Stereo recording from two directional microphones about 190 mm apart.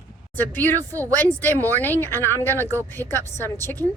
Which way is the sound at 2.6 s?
15° right (ahead or behind).